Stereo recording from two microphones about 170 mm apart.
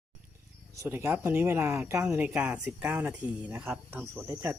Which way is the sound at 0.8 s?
15° right (ahead or behind).